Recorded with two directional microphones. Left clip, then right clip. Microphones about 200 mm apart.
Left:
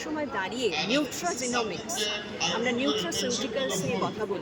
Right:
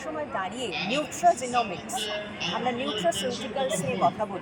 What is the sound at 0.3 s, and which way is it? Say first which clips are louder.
Speech: left 3 dB; 15° left (ahead or behind).